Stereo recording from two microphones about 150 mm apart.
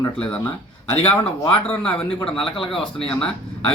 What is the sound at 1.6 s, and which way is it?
Speech, 5° left (ahead or behind).